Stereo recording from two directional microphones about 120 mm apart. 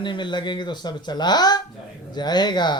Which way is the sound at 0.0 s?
40° left (ahead or behind).